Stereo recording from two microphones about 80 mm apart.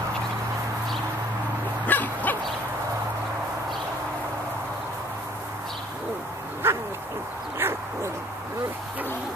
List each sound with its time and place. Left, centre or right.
1.9 s dog: left
6.6 s duck: right
7.5 s owl: right